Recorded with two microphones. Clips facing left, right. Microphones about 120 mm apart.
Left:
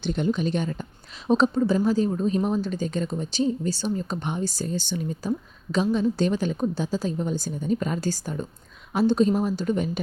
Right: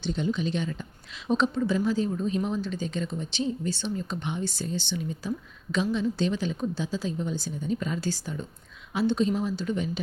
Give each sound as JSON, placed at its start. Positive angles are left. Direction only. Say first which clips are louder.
{"t": 0.0, "sound": "a woman's voice", "louder": "left 3 dB", "side_deg": 55}